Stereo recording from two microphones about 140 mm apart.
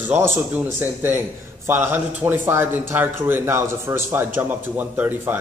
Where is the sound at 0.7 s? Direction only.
15° right (ahead or behind).